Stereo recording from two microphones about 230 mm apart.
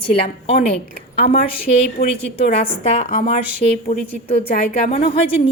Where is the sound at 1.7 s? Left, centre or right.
Left.